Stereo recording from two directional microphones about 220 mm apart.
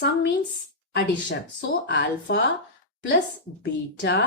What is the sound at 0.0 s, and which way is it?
A woman's voice, 45° left (ahead or behind).